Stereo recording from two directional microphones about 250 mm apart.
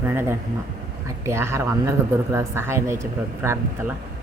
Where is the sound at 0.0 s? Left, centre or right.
Centre.